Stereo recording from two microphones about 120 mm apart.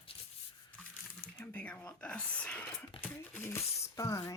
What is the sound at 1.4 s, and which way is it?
Speech, 15° left (ahead or behind).